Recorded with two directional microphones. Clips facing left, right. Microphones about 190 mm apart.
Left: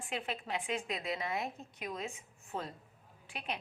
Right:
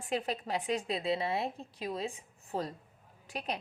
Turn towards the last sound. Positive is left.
turn(degrees=-40)  # may be behind; listen again after turning